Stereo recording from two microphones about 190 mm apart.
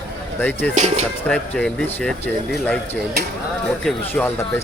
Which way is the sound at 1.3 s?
5° left (ahead or behind).